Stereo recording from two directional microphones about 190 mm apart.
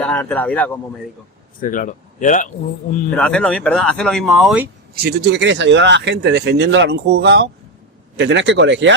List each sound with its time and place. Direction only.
0.0 s a man's voice: 5° left (ahead or behind)
1.6 s speech: 45° left (ahead or behind)
3.2 s speech: 5° left (ahead or behind)
5.0 s speech: 60° right (ahead or behind)